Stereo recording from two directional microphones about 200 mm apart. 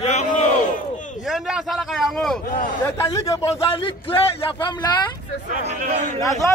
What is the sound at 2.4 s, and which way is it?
Speech, 40° left (ahead or behind).